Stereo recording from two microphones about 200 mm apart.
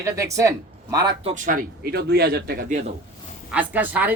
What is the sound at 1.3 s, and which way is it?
Speech, 40° right (ahead or behind).